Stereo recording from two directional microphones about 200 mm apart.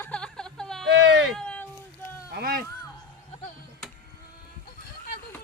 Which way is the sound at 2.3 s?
50° right (ahead or behind).